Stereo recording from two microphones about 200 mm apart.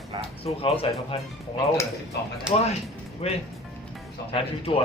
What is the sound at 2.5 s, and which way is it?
Speech, 30° left (ahead or behind).